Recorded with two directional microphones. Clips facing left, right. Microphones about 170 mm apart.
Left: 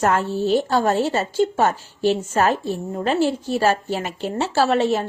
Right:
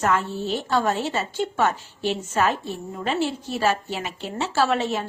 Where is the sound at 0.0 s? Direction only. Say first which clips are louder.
Left 4 dB; 45° left (ahead or behind).